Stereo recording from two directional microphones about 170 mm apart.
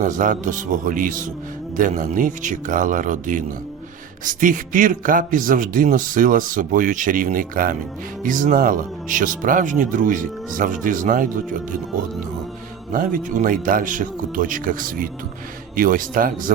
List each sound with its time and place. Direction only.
0.0 s a man's voice: 50° right (ahead or behind)
12.9 s a man's voice: 50° right (ahead or behind)